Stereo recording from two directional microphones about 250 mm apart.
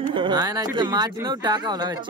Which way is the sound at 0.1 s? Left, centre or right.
Centre.